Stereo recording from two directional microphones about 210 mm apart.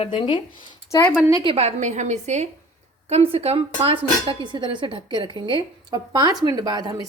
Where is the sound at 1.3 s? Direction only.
25° right (ahead or behind).